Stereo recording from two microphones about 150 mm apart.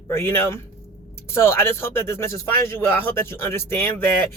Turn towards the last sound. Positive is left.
turn(degrees=15)  # may be behind; listen again after turning